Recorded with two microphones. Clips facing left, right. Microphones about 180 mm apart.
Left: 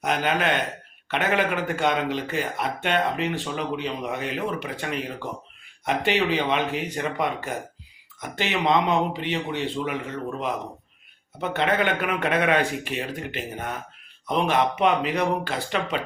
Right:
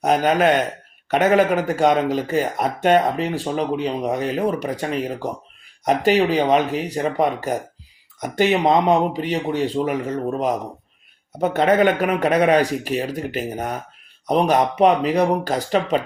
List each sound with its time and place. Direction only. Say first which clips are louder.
0.0 s speech: right 7 dB; 40° right (ahead or behind)